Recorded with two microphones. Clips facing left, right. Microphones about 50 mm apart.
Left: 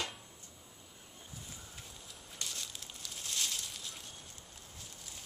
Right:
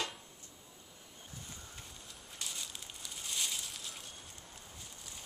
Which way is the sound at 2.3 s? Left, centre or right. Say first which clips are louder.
Even; centre.